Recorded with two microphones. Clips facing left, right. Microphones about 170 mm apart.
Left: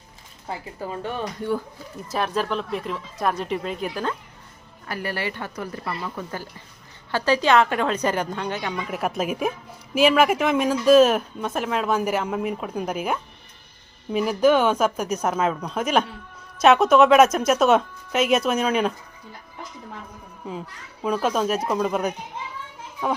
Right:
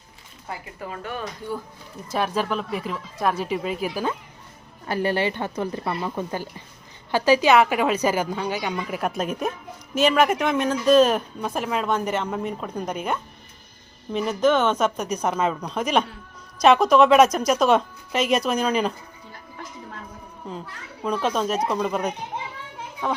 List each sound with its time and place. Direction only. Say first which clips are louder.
0.4 s speech: left 3 dB; 30° left (ahead or behind)
2.0 s a woman's voice: right 1 dB; centre (ahead or behind)
4.9 s a woman's voice: right 6 dB; 25° right (ahead or behind); by 18.9 s 5° left (ahead or behind)
21.0 s a woman's voice: left 1 dB; 5° left (ahead or behind)